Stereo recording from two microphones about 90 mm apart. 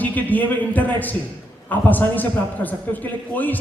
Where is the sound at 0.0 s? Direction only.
20° left (ahead or behind).